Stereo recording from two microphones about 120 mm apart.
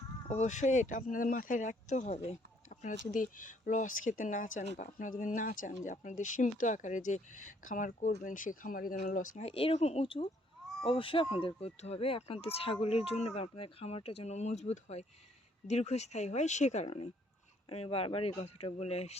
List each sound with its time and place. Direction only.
0.3 s speech: 75° left (ahead or behind)